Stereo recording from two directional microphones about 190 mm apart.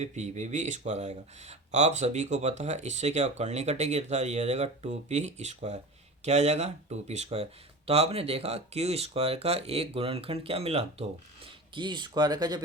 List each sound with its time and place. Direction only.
0.0 s speech: 40° right (ahead or behind); by 12.6 s 20° right (ahead or behind)